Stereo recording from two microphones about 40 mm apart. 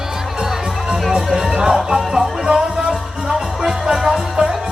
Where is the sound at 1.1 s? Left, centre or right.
Centre.